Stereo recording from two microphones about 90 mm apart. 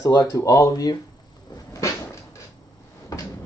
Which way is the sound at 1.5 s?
35° left (ahead or behind).